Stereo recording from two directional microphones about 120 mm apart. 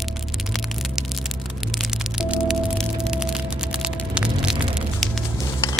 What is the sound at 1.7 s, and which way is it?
Music, 5° right (ahead or behind).